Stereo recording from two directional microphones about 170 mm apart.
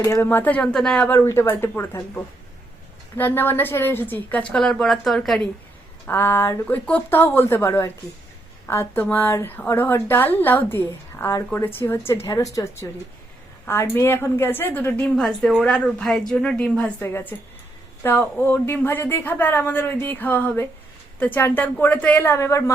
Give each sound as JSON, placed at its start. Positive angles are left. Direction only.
{"t": 0.0, "sound": "a woman's voice", "side_deg": 15}
{"t": 6.1, "sound": "a woman's voice", "side_deg": 10}